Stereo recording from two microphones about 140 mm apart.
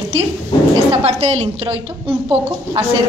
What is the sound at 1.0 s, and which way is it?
Speech, 50° right (ahead or behind).